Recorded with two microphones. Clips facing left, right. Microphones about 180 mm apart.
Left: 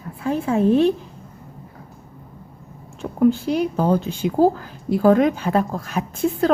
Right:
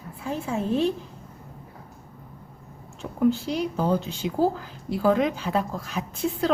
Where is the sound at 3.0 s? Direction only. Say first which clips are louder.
Left 5 dB; 55° left (ahead or behind).